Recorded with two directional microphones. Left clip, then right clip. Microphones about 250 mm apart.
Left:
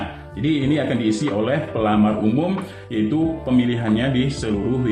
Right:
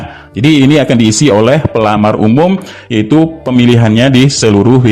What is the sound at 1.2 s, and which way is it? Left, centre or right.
Speech, right.